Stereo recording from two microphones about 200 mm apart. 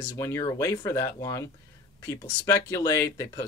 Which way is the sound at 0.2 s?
15° left (ahead or behind).